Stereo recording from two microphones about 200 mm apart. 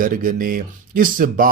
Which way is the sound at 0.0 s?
45° right (ahead or behind).